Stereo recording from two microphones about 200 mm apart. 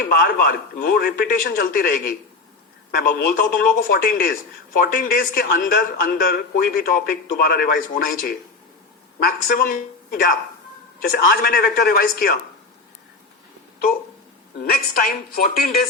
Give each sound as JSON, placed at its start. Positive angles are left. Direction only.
{"t": 0.0, "sound": "speech", "side_deg": 50}
{"t": 14.6, "sound": "speech", "side_deg": 45}